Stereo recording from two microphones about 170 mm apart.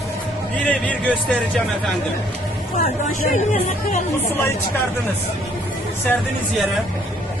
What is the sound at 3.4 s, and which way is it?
Speech, 45° left (ahead or behind).